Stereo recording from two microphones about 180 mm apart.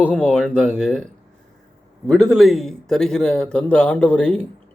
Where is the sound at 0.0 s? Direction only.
5° left (ahead or behind).